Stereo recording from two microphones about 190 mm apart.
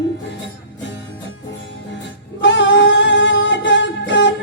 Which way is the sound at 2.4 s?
75° left (ahead or behind).